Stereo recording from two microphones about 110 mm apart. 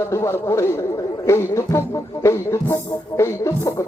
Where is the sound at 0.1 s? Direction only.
25° left (ahead or behind).